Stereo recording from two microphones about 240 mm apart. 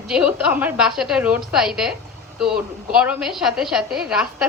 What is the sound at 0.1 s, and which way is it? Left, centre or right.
A woman's voice, centre.